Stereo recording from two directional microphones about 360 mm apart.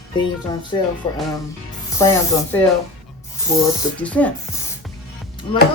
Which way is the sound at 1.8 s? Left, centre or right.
Centre.